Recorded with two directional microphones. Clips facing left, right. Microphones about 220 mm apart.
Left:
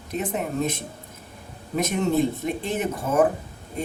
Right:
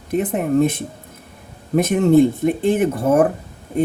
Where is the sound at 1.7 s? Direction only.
55° right (ahead or behind).